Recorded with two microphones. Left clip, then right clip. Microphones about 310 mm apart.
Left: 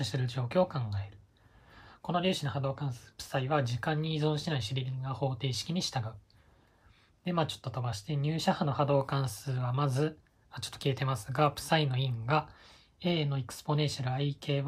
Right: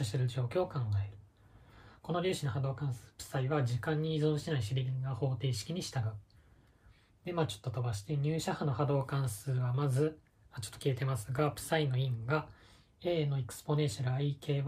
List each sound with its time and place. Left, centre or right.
0.0 s speech: centre
2.0 s speech: centre
7.2 s speech: left